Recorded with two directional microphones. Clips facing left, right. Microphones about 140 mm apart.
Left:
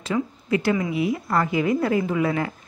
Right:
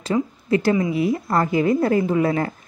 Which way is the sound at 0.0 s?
35° right (ahead or behind).